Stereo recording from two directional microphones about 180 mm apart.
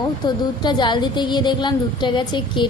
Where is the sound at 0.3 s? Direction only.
25° left (ahead or behind).